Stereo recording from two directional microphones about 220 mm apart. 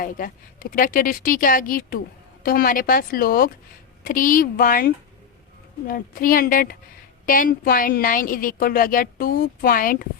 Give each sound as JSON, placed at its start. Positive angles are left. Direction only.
{"t": 0.0, "sound": "a woman's voice", "side_deg": 40}
{"t": 5.9, "sound": "a woman's voice", "side_deg": 40}